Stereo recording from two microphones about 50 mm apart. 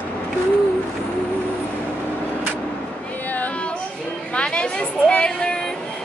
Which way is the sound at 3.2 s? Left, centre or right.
Left.